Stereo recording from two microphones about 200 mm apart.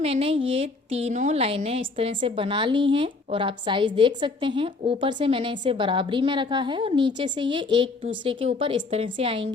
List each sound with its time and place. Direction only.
0.0 s a woman's voice: 30° right (ahead or behind)